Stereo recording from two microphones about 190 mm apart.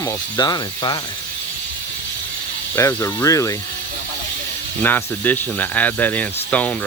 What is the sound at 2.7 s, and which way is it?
Speech, 15° left (ahead or behind).